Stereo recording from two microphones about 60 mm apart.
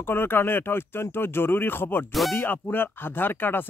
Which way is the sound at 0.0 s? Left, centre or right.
Left.